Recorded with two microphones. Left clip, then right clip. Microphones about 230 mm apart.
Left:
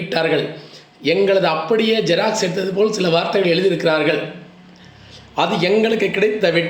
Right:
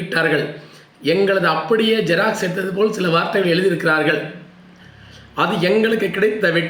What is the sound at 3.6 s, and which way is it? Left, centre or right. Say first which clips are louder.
Speech: left 1 dB; left.